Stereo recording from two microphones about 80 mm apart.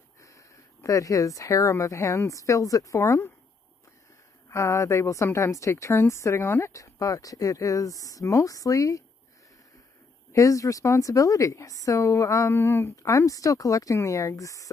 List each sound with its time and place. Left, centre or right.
0.2 s speech: left
3.0 s a woman's voice: left
4.5 s a woman's voice: left
10.3 s speech: left
12.9 s speech: left